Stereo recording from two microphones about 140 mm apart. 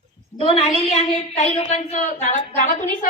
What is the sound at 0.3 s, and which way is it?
Speech, 40° left (ahead or behind).